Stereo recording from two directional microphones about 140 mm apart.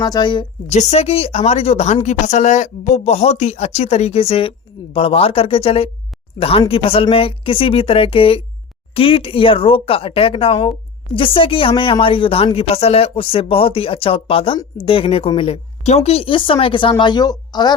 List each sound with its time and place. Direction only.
0.0 s speech: 30° left (ahead or behind)
0.7 s speech: 50° left (ahead or behind); by 17.7 s 30° left (ahead or behind)